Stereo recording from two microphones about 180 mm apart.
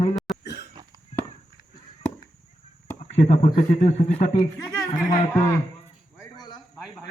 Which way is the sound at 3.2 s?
40° left (ahead or behind).